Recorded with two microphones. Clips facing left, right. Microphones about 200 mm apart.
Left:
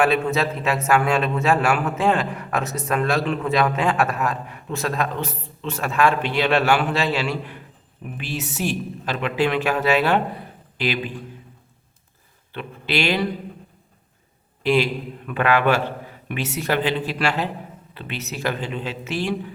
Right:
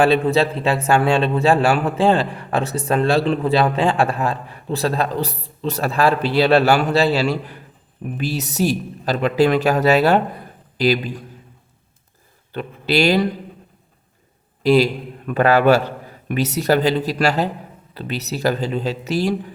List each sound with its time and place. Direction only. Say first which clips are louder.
0.0 s a man's voice: right 4 dB; 30° right (ahead or behind)
12.5 s a man's voice: right 6 dB; 40° right (ahead or behind)
14.6 s a man's voice: right 5 dB; 40° right (ahead or behind)